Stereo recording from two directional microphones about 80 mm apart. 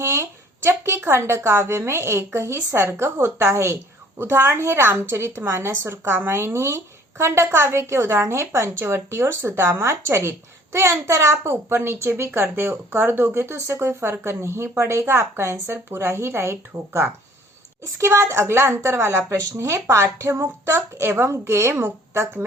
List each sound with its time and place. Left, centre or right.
0.0 s a woman's voice: right